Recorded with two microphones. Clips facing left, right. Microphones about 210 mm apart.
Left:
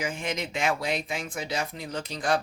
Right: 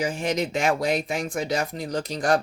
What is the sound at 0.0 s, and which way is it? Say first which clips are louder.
Speech: right 6 dB; 35° right (ahead or behind).